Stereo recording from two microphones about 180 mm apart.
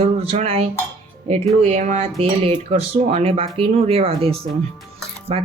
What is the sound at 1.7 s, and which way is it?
Speech, 40° right (ahead or behind).